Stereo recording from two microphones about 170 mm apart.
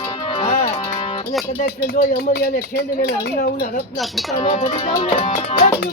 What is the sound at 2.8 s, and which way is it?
Speech, 75° left (ahead or behind).